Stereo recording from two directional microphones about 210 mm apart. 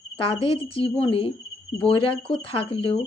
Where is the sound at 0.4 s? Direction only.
25° left (ahead or behind).